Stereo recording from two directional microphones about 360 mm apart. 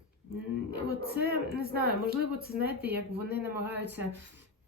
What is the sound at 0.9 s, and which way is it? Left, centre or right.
Speech, right.